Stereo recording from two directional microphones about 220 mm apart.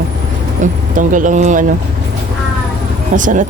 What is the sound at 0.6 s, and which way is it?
Speech, 35° right (ahead or behind).